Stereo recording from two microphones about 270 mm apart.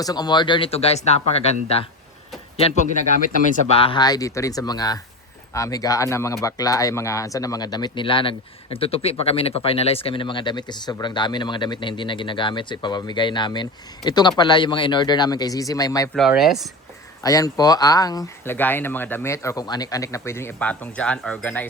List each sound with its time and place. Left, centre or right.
0.0 s speech: centre
2.6 s speech: left
16.1 s speech: centre
17.2 s speech: centre